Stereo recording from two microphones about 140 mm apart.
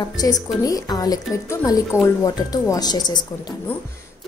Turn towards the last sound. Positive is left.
turn(degrees=30)  # may be behind; listen again after turning